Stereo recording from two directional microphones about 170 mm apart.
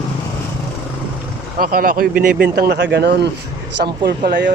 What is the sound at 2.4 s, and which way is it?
Speech, 70° right (ahead or behind).